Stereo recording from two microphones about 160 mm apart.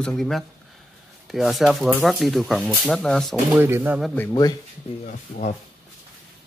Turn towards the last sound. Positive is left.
turn(degrees=50)  # may be behind; listen again after turning